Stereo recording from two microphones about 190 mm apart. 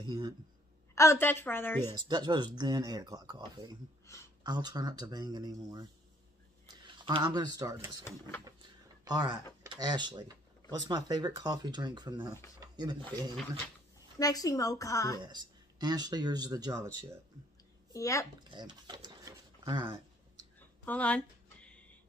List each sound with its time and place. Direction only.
0.0 s speech: 25° right (ahead or behind)
0.9 s speech: 15° left (ahead or behind)
2.0 s speech: 20° right (ahead or behind)
7.0 s speech: 25° right (ahead or behind)
9.0 s speech: 20° right (ahead or behind)
14.1 s speech: 20° left (ahead or behind)
15.2 s speech: 20° right (ahead or behind)
17.9 s speech: 15° left (ahead or behind)
18.5 s a sound: 25° right (ahead or behind)
20.8 s a sound: 10° left (ahead or behind)